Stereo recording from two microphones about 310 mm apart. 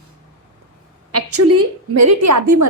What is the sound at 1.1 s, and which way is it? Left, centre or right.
A woman's voice, right.